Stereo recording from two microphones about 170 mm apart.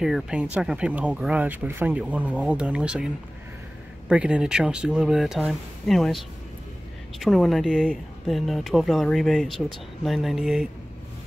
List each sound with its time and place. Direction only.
0.0 s speech: 5° right (ahead or behind)
4.1 s speech: 5° right (ahead or behind)